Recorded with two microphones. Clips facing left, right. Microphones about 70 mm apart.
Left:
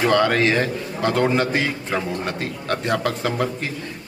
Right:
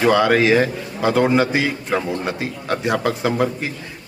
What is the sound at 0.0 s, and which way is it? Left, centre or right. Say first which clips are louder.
A man's voice: right 3 dB; centre.